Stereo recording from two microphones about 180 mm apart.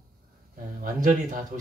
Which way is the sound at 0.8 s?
45° right (ahead or behind).